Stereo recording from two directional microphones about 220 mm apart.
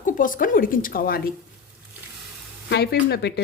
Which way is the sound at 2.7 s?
50° left (ahead or behind).